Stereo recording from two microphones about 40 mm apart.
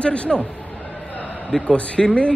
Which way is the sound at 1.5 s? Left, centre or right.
Left.